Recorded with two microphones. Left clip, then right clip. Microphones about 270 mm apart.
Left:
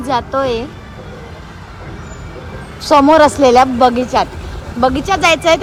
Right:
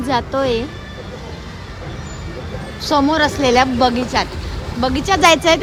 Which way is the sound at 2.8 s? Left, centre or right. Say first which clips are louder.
Left 7 dB; centre.